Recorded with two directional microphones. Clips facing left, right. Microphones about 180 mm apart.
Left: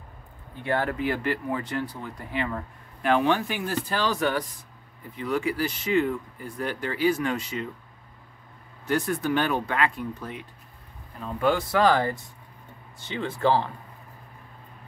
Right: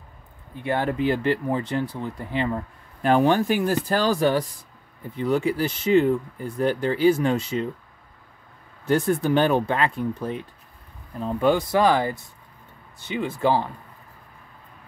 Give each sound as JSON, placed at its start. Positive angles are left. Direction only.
{"t": 0.7, "sound": "speech", "side_deg": -20}
{"t": 8.8, "sound": "speech", "side_deg": -30}
{"t": 11.4, "sound": "speech", "side_deg": -15}